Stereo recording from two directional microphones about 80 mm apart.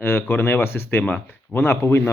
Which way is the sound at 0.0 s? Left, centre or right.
Left.